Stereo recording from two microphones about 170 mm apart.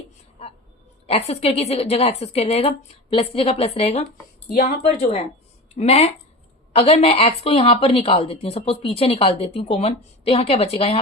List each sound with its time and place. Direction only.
1.0 s a woman's voice: 35° left (ahead or behind)